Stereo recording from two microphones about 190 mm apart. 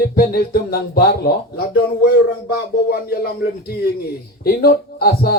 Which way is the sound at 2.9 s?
55° left (ahead or behind).